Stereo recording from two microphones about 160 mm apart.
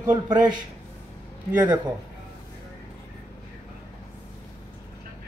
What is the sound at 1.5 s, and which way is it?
Speech, 10° right (ahead or behind).